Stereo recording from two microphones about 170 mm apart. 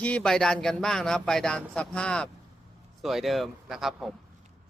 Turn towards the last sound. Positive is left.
turn(degrees=0)  # may be behind; listen again after turning